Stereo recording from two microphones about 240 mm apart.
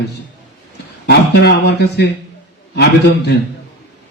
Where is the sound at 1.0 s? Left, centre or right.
Left.